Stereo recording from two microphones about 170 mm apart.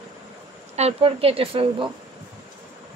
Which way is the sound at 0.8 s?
35° right (ahead or behind).